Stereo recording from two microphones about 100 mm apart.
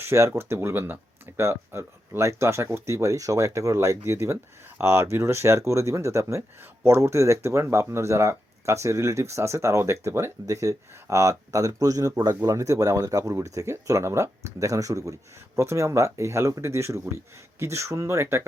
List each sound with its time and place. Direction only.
0.0 s speech: 25° right (ahead or behind)